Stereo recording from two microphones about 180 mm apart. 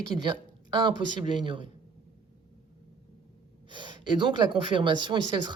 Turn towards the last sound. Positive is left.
turn(degrees=-25)  # may be behind; listen again after turning